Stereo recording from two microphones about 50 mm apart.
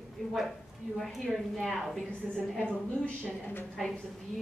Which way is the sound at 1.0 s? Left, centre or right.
Centre.